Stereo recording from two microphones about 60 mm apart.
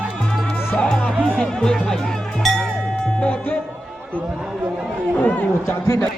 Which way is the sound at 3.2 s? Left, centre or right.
Left.